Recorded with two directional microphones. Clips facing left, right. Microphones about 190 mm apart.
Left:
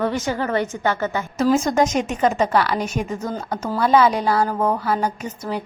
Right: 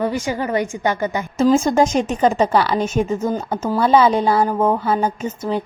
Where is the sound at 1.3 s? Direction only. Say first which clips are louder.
Right 3 dB; 30° right (ahead or behind).